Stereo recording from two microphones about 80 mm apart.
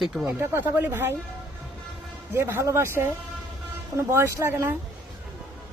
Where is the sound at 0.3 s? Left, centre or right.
Right.